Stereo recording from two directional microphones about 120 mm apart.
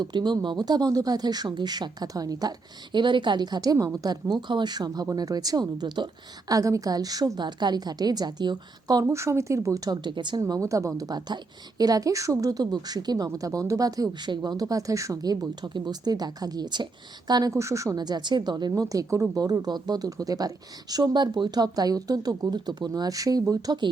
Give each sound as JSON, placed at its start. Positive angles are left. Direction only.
{"t": 0.0, "sound": "speech", "side_deg": -35}
{"t": 9.0, "sound": "speech", "side_deg": -25}
{"t": 10.4, "sound": "speech", "side_deg": -25}